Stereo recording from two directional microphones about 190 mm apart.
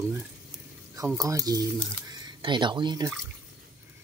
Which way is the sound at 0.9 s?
15° right (ahead or behind).